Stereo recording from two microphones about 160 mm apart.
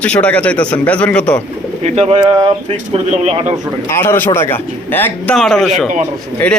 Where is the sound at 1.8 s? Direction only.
40° right (ahead or behind).